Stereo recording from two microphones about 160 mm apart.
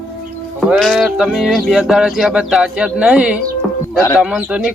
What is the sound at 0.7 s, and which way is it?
Speech, centre (ahead or behind).